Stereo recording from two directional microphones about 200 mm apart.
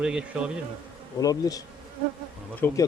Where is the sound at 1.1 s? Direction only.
20° left (ahead or behind).